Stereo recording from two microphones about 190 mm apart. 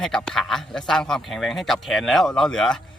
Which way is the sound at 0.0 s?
5° left (ahead or behind).